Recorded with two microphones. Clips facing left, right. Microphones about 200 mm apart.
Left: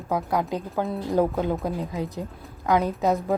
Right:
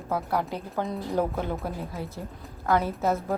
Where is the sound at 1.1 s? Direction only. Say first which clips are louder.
Left 5 dB; 15° left (ahead or behind).